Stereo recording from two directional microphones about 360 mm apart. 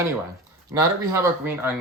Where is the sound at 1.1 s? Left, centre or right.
Centre.